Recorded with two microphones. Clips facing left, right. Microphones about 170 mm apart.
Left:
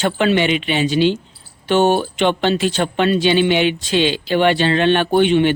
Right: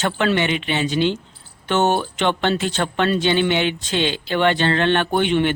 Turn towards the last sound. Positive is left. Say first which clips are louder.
# left 4 dB
turn(degrees=20)  # may be behind; listen again after turning